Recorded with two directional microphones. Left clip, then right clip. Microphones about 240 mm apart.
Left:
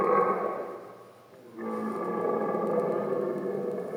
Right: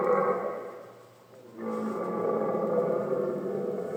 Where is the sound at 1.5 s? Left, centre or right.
Left.